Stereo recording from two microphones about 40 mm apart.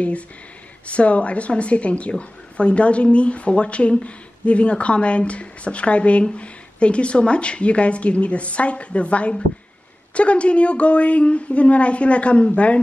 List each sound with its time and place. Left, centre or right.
0.8 s a woman's voice: left